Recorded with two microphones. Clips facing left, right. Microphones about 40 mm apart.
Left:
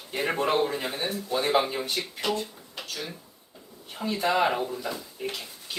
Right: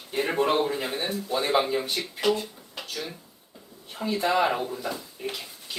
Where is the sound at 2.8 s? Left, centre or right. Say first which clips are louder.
Right 1 dB; centre.